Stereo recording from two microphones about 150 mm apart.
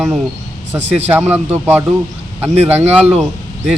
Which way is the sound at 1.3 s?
10° right (ahead or behind).